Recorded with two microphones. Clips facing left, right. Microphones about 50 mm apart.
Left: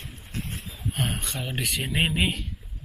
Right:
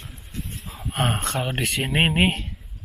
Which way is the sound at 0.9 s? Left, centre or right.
Right.